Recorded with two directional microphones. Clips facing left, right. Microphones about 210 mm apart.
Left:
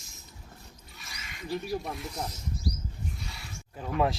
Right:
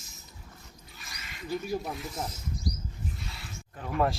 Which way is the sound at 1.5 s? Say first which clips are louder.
Even; 35° left (ahead or behind).